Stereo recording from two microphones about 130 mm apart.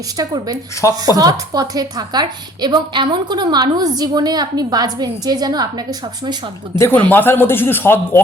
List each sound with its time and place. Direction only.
0.2 s a woman's voice: 30° right (ahead or behind)
6.7 s a man's voice: 15° left (ahead or behind)